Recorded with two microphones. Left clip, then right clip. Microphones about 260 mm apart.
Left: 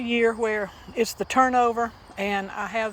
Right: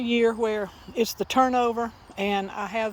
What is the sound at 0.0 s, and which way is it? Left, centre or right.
Speech, right.